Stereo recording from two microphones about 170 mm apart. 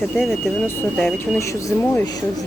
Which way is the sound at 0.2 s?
Centre (ahead or behind).